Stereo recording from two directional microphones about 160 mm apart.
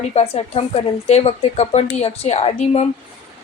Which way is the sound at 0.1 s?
40° left (ahead or behind).